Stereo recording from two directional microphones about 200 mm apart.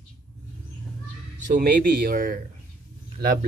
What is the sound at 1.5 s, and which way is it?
A man's voice, 45° right (ahead or behind).